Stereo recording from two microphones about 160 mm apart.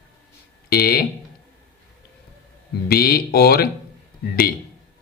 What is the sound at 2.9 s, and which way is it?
Speech, 70° left (ahead or behind).